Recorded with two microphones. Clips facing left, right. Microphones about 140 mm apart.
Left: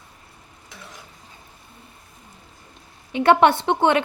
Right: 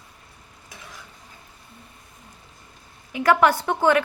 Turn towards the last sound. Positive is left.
turn(degrees=25)  # may be behind; listen again after turning